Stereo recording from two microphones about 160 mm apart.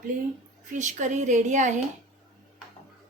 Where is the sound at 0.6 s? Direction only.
50° right (ahead or behind).